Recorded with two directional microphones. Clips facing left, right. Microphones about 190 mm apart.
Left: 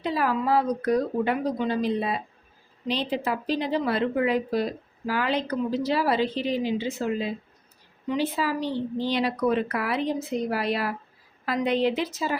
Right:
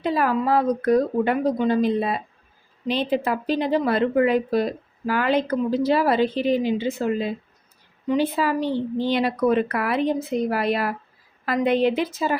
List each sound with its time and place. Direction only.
0.0 s a woman's voice: 55° right (ahead or behind)
8.1 s a woman's voice: 55° right (ahead or behind)